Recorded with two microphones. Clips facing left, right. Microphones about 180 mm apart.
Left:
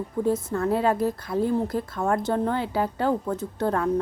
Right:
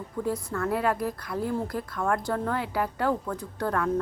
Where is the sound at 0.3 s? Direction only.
25° left (ahead or behind).